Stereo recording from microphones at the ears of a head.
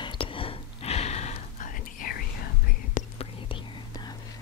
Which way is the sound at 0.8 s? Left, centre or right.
Left.